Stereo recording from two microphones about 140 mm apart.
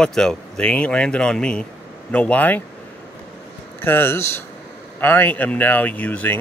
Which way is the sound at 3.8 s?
15° left (ahead or behind).